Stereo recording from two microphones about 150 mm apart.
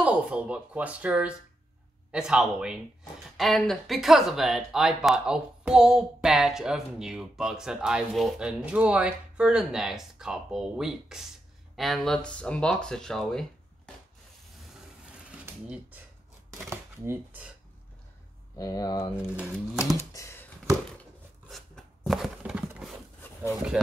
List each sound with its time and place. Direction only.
0.0 s speech: 10° right (ahead or behind)
16.4 s speech: 15° right (ahead or behind)
18.6 s speech: 25° left (ahead or behind)
19.1 s speech: 5° right (ahead or behind)
20.0 s a sound: 15° left (ahead or behind)
21.0 s a sound: centre (ahead or behind)
23.5 s speech: 5° right (ahead or behind)